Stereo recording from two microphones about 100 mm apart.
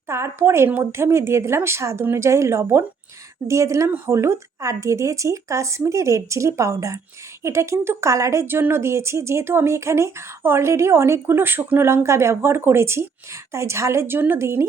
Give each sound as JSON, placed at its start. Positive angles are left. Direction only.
{"t": 0.1, "sound": "speech", "side_deg": -25}